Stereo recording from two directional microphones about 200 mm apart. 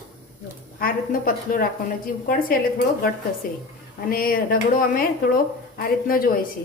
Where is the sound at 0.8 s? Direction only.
45° left (ahead or behind).